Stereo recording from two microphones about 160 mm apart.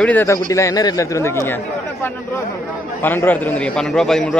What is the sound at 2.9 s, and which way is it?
A man's voice, 10° left (ahead or behind).